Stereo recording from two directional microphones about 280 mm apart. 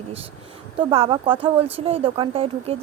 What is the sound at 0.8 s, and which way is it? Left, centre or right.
A woman's voice, centre.